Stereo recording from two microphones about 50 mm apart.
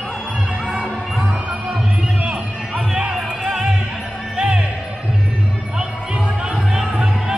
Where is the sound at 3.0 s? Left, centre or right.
Centre.